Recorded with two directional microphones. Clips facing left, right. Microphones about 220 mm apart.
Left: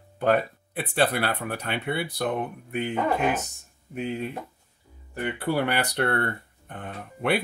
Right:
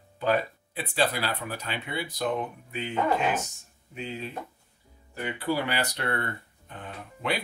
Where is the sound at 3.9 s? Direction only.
55° left (ahead or behind).